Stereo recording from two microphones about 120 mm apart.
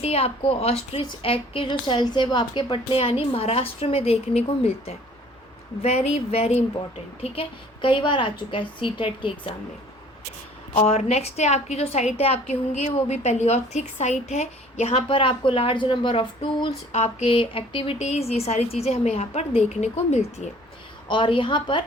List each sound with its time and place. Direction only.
0.0 s a woman's voice: 60° left (ahead or behind)
10.8 s a woman's voice: 60° left (ahead or behind)
15.0 s a woman's voice: 45° left (ahead or behind)
16.9 s speech: 65° left (ahead or behind)
17.2 s a woman's voice: 45° left (ahead or behind)
18.0 s a woman's voice: 65° left (ahead or behind)
21.1 s a woman's voice: 45° left (ahead or behind)